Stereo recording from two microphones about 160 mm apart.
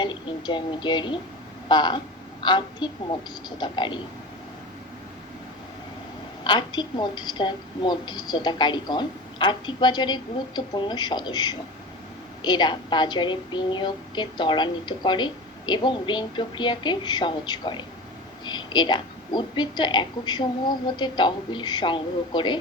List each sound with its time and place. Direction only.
0.0 s speech: 30° left (ahead or behind)
1.6 s a sound: 30° left (ahead or behind)
2.4 s speech: 30° left (ahead or behind)
6.4 s speech: 30° left (ahead or behind)